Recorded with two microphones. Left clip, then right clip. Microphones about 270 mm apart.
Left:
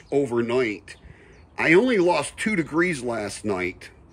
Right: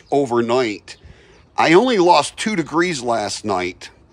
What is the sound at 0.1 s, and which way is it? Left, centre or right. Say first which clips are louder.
Speech: right 6 dB; centre.